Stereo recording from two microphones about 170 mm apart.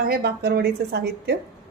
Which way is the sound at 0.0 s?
65° right (ahead or behind).